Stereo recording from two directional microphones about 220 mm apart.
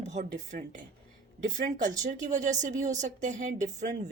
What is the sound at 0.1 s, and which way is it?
Speech, 30° right (ahead or behind).